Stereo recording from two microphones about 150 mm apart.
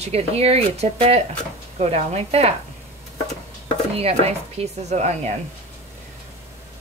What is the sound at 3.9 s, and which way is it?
Speech, 45° right (ahead or behind).